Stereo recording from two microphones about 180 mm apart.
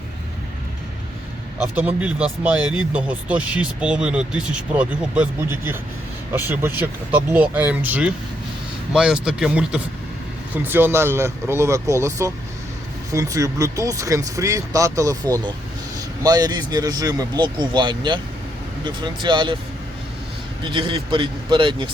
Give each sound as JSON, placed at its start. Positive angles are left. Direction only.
{"t": 1.5, "sound": "speech", "side_deg": -5}
{"t": 20.7, "sound": "speech", "side_deg": -25}